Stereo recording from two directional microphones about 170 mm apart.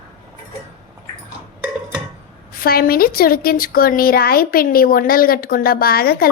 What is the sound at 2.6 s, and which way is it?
A woman's voice, 60° left (ahead or behind).